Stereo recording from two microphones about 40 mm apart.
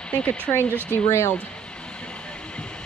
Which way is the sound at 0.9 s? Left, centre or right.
Left.